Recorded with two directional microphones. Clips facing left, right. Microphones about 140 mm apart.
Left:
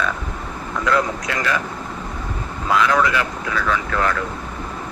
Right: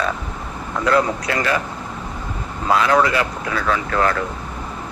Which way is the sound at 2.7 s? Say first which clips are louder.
Right 2 dB; 35° right (ahead or behind).